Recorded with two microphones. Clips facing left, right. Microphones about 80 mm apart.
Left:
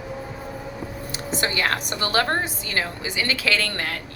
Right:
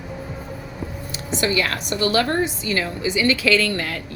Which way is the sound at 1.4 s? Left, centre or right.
Left.